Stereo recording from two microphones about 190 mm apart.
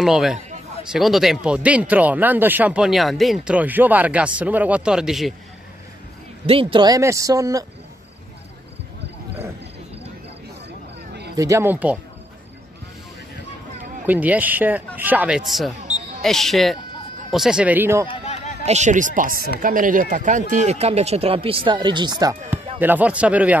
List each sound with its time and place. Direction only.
0.0 s a man's voice: centre (ahead or behind)
6.4 s speech: 30° right (ahead or behind)
11.3 s speech: 15° right (ahead or behind)
14.0 s a man's voice: 10° right (ahead or behind)
18.0 s a sound: 30° left (ahead or behind)
18.7 s speech: 40° right (ahead or behind); by 23.6 s 5° right (ahead or behind)